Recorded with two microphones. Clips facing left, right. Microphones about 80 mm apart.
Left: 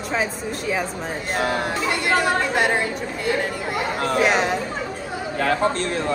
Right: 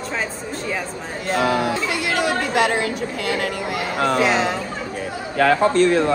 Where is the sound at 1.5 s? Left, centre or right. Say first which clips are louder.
Right 2 dB; right.